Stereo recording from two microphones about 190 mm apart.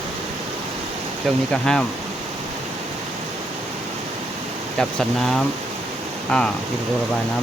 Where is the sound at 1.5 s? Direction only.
5° left (ahead or behind).